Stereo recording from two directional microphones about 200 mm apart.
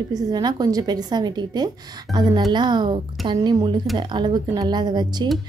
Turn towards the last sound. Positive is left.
turn(degrees=-20)  # may be behind; listen again after turning